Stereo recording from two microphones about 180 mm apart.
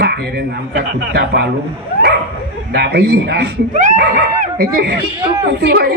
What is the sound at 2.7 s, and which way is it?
Speech, 65° right (ahead or behind).